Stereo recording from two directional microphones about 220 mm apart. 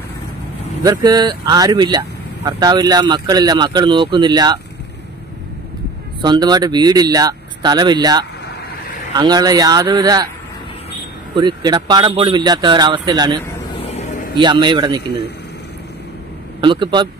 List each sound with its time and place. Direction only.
0.8 s speech: 20° right (ahead or behind)
6.2 s speech: 20° right (ahead or behind)
11.3 s speech: 20° right (ahead or behind)
13.7 s vehicle: 30° left (ahead or behind)
14.4 s speech: 20° right (ahead or behind)
16.6 s speech: 20° right (ahead or behind)